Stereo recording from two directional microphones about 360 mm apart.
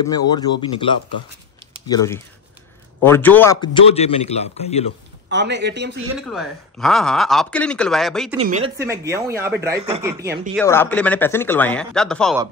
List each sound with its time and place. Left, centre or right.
0.1 s a man's voice: centre
5.3 s speech: right
6.1 s speech: centre
8.4 s speech: centre
10.5 s speech: centre